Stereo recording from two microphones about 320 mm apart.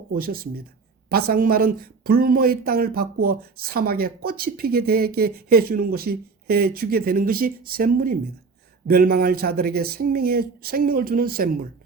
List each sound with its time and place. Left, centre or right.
0.1 s speech: right